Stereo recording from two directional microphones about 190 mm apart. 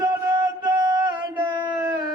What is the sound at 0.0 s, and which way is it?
Music, 20° right (ahead or behind).